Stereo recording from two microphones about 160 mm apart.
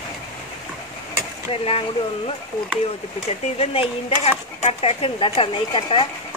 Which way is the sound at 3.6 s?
35° left (ahead or behind).